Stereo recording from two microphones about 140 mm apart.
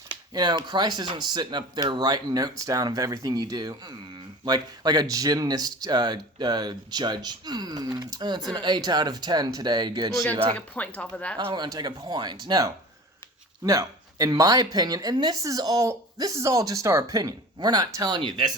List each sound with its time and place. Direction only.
0.1 s speech: 30° right (ahead or behind)
10.5 s speech: 10° left (ahead or behind)
11.3 s speech: 30° right (ahead or behind)